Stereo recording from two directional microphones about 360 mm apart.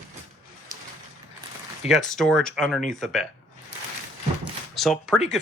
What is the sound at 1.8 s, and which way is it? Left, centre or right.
Speech, centre.